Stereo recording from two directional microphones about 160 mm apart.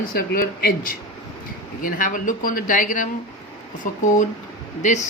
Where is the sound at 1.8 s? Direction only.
55° left (ahead or behind).